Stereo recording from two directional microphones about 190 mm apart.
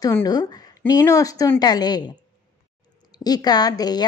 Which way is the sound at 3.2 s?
20° left (ahead or behind).